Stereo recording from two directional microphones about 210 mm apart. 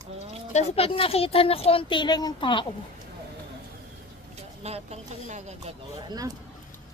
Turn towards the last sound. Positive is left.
turn(degrees=-15)  # may be behind; listen again after turning